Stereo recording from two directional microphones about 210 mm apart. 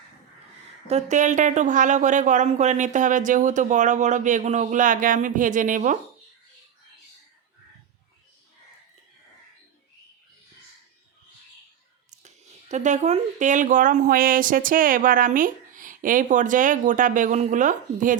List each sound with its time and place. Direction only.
0.9 s speech: 30° right (ahead or behind)
12.1 s speech: 35° right (ahead or behind)